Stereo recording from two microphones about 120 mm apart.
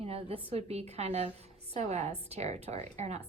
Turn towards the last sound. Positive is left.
turn(degrees=-65)  # may be behind; listen again after turning